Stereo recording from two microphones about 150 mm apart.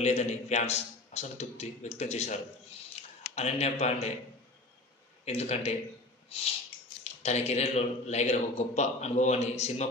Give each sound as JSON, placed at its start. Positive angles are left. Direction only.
{"t": 0.0, "sound": "a man's voice", "side_deg": 45}
{"t": 5.2, "sound": "a man's voice", "side_deg": 45}
{"t": 6.2, "sound": "a sound", "side_deg": 40}
{"t": 7.0, "sound": "a man's voice", "side_deg": 45}